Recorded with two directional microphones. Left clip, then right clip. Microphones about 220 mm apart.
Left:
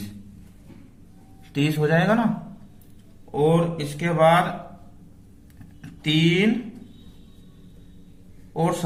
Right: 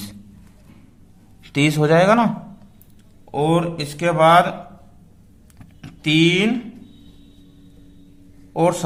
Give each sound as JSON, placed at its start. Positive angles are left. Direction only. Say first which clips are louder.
{"t": 1.5, "sound": "speech", "louder": "right 6 dB", "side_deg": -35}
{"t": 3.3, "sound": "speech", "louder": "right 2 dB", "side_deg": -40}
{"t": 5.8, "sound": "speech", "louder": "right 6 dB", "side_deg": -30}